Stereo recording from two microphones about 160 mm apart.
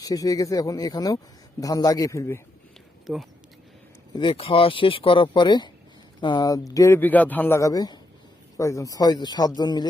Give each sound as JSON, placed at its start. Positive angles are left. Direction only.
{"t": 0.0, "sound": "a man's voice", "side_deg": 25}
{"t": 3.1, "sound": "speech", "side_deg": -5}
{"t": 4.1, "sound": "a man's voice", "side_deg": 30}